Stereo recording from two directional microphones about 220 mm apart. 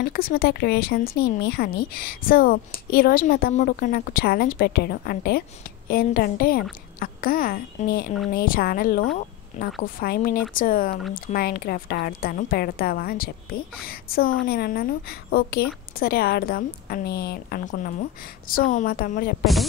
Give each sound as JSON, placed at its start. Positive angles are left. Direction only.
{"t": 0.0, "sound": "a woman's voice", "side_deg": 45}
{"t": 9.5, "sound": "a woman's voice", "side_deg": 30}
{"t": 9.9, "sound": "a woman's voice", "side_deg": 40}